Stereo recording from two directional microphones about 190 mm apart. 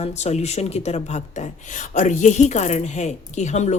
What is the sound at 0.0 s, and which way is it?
A woman's voice, 35° left (ahead or behind).